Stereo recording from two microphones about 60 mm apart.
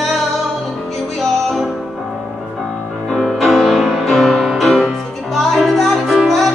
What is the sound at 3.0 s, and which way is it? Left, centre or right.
Music, centre.